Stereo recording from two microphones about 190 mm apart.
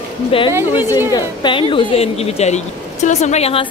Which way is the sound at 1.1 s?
25° left (ahead or behind).